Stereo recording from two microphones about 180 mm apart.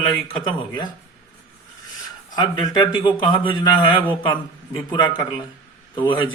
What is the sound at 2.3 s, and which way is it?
A man's voice, 25° left (ahead or behind).